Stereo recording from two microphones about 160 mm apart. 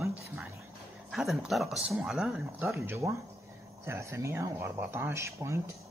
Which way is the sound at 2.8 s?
15° right (ahead or behind).